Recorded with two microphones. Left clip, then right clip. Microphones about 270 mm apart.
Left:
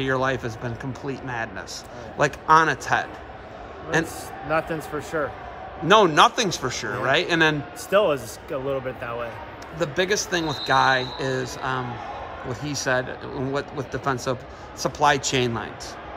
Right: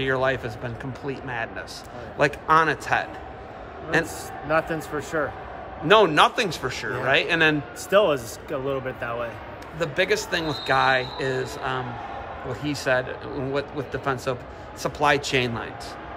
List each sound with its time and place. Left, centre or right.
0.0 s speech: left
4.5 s a man's voice: centre
5.9 s speech: left
7.9 s a man's voice: centre
9.8 s speech: left